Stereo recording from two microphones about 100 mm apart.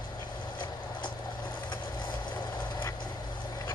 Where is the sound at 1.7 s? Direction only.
45° left (ahead or behind).